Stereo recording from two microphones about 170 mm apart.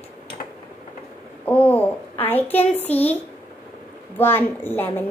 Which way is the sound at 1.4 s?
10° left (ahead or behind).